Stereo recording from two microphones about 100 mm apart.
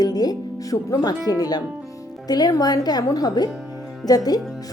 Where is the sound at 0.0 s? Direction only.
40° left (ahead or behind).